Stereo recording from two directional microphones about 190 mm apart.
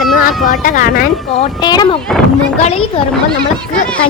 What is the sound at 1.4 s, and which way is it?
Speech, 20° left (ahead or behind).